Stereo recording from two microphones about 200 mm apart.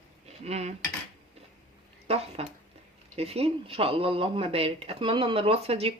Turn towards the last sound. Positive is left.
turn(degrees=-30)  # may be behind; listen again after turning